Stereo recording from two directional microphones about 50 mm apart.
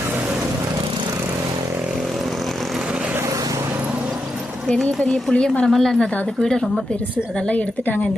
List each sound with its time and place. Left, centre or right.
5.3 s a woman's voice: left
5.6 s a woman's voice: centre
7.5 s a woman's voice: left